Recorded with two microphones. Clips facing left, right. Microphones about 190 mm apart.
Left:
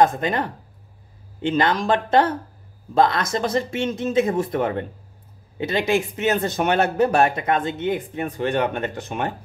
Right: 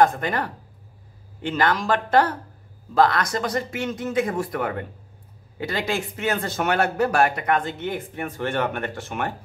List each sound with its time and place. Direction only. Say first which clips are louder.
0.0 s speech: left 1 dB; 20° left (ahead or behind)